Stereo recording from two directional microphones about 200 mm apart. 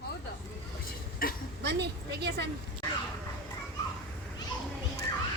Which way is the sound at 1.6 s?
55° right (ahead or behind).